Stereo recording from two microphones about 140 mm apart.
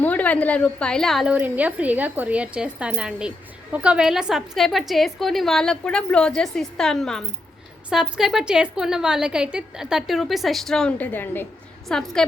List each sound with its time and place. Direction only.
0.0 s a woman's voice: 10° left (ahead or behind)
1.3 s speech: 10° right (ahead or behind); by 11.4 s 15° left (ahead or behind)
11.9 s speech: 5° left (ahead or behind)